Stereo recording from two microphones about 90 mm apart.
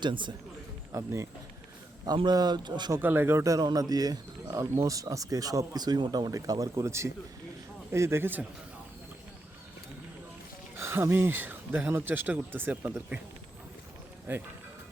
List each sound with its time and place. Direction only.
0.0 s speech: 60° right (ahead or behind)
0.9 s speech: 35° right (ahead or behind)
2.2 s speech: 50° right (ahead or behind)
3.0 s speech: 25° right (ahead or behind); by 4.5 s 45° right (ahead or behind)
4.5 s speech: 35° right (ahead or behind)
10.8 s speech: 30° right (ahead or behind)
14.3 s speech: 20° right (ahead or behind)